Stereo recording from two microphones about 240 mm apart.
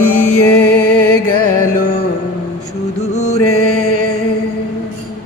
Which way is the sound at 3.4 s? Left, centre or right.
Left.